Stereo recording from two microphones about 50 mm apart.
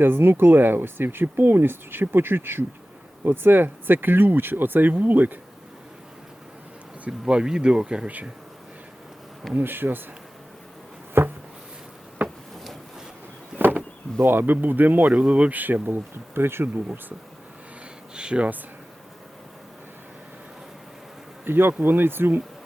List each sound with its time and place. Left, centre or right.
0.0 s speech: right
7.1 s speech: centre
9.6 s speech: right
11.2 s a sound: right
12.2 s a sound: right
14.3 s speech: right
16.7 s speech: right
18.1 s a sound: centre
21.4 s speech: right